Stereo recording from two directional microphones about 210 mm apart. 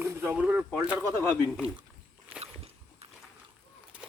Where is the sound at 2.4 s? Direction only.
30° right (ahead or behind).